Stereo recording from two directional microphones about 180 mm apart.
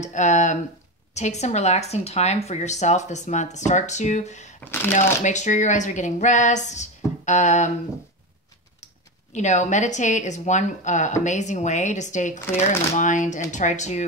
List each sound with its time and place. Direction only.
0.0 s speech: 40° left (ahead or behind)
8.8 s speech: 40° left (ahead or behind)